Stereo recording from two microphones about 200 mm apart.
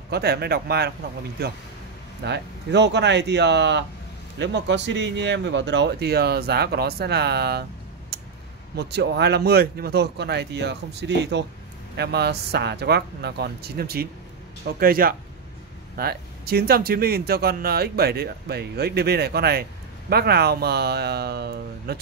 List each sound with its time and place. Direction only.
0.1 s speech: 55° right (ahead or behind)
8.1 s a sound: 55° right (ahead or behind)
8.7 s speech: 55° right (ahead or behind)